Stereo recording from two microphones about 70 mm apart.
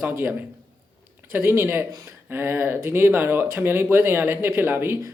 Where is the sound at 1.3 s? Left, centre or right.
Right.